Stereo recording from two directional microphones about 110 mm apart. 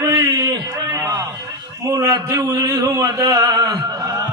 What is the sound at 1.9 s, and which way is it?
A man's voice, 25° right (ahead or behind).